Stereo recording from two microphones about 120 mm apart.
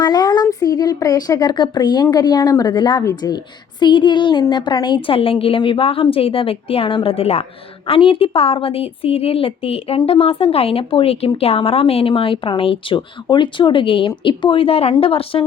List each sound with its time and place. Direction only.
0.0 s a sound: 35° left (ahead or behind)
0.6 s a woman's voice: 30° left (ahead or behind)
3.0 s a woman's voice: 30° left (ahead or behind)
3.8 s a woman's voice: 40° left (ahead or behind)